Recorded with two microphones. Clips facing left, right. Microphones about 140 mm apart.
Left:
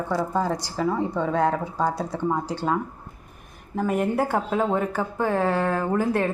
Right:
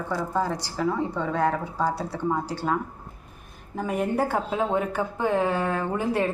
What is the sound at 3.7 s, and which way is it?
Speech, 5° left (ahead or behind).